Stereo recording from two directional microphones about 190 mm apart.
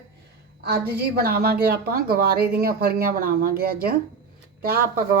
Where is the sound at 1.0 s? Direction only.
55° right (ahead or behind).